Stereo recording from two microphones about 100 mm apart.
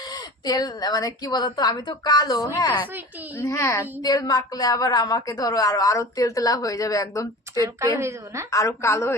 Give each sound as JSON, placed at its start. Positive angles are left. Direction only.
{"t": 0.1, "sound": "a woman's voice", "side_deg": 40}
{"t": 3.3, "sound": "a woman's voice", "side_deg": 30}
{"t": 7.5, "sound": "a woman's voice", "side_deg": -35}
{"t": 8.4, "sound": "a woman's voice", "side_deg": 30}